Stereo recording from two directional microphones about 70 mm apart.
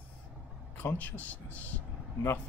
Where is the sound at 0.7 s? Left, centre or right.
Left.